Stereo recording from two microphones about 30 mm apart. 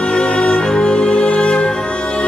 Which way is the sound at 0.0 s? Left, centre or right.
Left.